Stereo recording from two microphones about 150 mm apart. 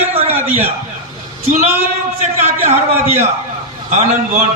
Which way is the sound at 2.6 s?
45° right (ahead or behind).